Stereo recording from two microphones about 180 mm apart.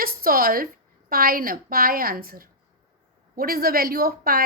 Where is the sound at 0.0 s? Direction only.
55° right (ahead or behind).